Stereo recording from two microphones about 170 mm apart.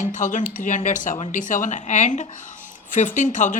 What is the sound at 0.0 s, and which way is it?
Speech, 50° left (ahead or behind).